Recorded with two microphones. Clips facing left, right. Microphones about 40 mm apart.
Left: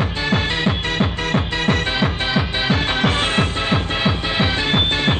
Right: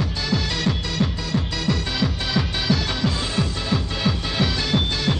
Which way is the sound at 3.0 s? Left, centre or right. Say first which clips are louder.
Left 6 dB; left.